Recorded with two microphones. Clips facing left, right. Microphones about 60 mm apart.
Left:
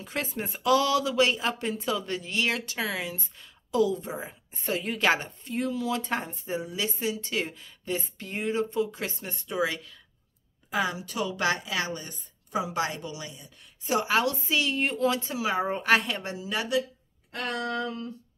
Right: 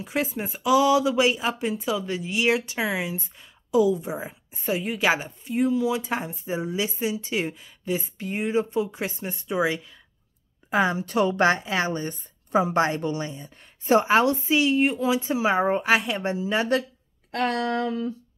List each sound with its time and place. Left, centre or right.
0.0 s speech: centre
6.6 s speech: right
10.7 s speech: right; by 15.2 s centre
15.2 s speech: right
15.8 s speech: centre
16.2 s speech: right
17.3 s speech: right